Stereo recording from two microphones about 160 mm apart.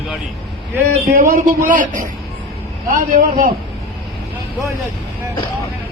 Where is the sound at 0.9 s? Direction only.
55° right (ahead or behind).